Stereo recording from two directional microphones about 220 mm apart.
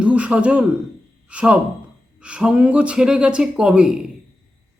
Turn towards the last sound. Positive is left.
turn(degrees=-5)  # may be behind; listen again after turning